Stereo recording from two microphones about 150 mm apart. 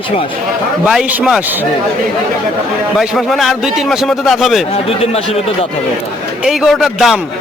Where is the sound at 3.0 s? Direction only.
Centre (ahead or behind).